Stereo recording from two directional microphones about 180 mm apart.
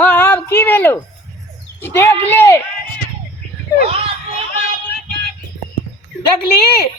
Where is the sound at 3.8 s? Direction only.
35° right (ahead or behind).